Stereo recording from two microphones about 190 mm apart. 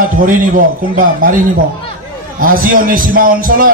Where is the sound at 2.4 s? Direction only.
45° right (ahead or behind).